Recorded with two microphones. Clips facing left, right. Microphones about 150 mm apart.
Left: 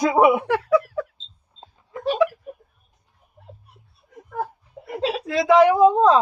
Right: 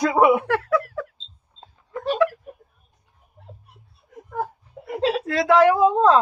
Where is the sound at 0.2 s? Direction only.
Centre (ahead or behind).